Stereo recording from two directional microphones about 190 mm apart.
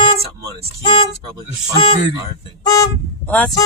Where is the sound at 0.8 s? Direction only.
25° left (ahead or behind).